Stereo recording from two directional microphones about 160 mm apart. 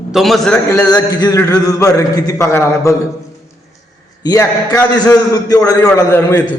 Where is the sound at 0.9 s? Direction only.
25° left (ahead or behind).